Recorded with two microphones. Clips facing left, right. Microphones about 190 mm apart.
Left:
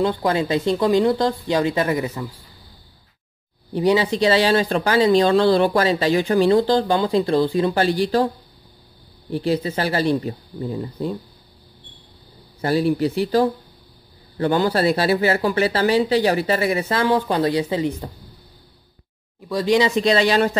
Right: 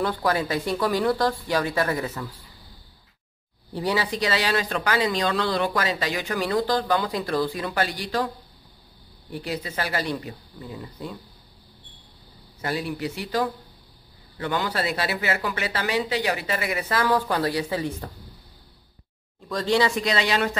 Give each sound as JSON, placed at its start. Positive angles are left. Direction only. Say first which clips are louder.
{"t": 0.0, "sound": "speech", "louder": "left 4 dB", "side_deg": 25}
{"t": 3.7, "sound": "speech", "louder": "left 8 dB", "side_deg": 20}
{"t": 9.3, "sound": "speech", "louder": "left 9 dB", "side_deg": 30}
{"t": 12.6, "sound": "speech", "louder": "left 9 dB", "side_deg": 30}
{"t": 19.5, "sound": "speech", "louder": "left 4 dB", "side_deg": 15}
{"t": 20.0, "sound": "speech", "louder": "left 7 dB", "side_deg": 30}